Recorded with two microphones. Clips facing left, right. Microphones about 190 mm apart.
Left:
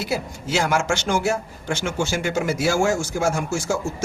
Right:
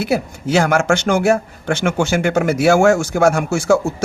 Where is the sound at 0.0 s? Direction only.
60° right (ahead or behind).